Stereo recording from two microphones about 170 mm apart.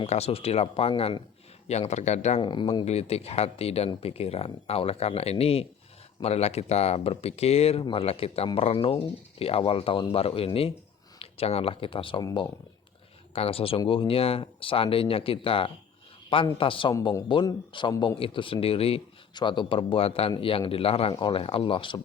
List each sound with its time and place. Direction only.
0.0 s speech: 35° left (ahead or behind)
2.4 s a man's voice: 30° left (ahead or behind)
2.8 s a man's voice: 40° left (ahead or behind)